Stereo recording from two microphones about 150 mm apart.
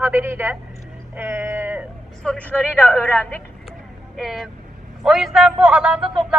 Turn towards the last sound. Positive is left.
turn(degrees=-5)  # may be behind; listen again after turning